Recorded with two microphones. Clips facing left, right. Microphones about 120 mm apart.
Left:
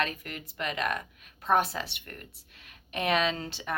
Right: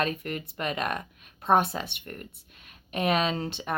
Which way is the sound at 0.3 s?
35° right (ahead or behind).